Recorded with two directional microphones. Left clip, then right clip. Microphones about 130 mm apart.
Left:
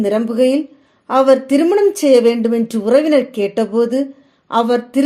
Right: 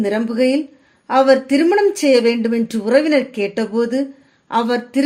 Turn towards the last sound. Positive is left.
turn(degrees=25)  # may be behind; listen again after turning